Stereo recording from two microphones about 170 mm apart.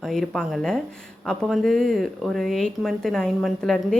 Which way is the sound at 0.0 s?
Centre (ahead or behind).